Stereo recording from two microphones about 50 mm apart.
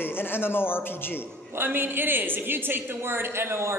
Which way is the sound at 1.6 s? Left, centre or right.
Right.